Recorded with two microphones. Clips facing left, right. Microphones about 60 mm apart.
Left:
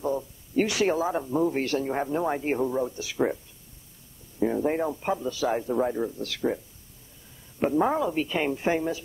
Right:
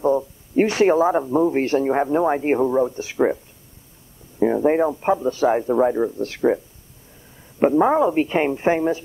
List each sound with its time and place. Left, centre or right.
0.0 s speech: right
4.4 s speech: right